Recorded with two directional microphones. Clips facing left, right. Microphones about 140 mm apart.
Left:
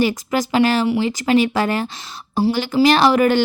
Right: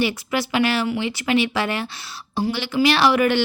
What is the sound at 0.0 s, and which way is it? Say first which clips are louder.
Speech: left 4 dB; 40° left (ahead or behind).